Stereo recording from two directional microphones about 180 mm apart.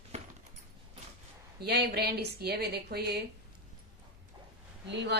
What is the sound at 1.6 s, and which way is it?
A woman's voice, 65° right (ahead or behind).